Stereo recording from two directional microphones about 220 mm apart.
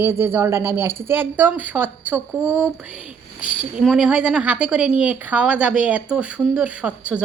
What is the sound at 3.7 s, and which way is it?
Speech, 5° right (ahead or behind).